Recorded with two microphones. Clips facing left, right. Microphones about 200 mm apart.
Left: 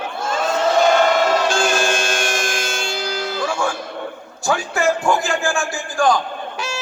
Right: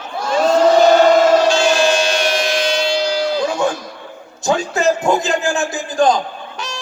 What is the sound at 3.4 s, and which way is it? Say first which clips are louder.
Music: right 4 dB; 20° right (ahead or behind).